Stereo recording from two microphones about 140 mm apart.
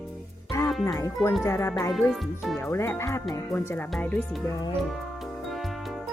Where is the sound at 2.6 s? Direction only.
15° left (ahead or behind).